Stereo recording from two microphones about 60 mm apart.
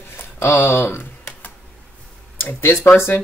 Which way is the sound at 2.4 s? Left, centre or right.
Left.